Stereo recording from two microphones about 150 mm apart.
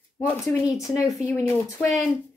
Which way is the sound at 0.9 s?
20° left (ahead or behind).